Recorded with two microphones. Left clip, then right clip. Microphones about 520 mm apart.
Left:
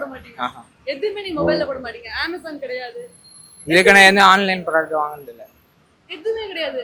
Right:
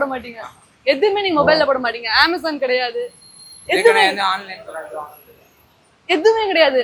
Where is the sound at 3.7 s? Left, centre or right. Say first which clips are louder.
Left 4 dB; left.